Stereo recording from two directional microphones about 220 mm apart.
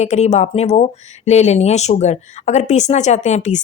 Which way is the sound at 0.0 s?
30° left (ahead or behind).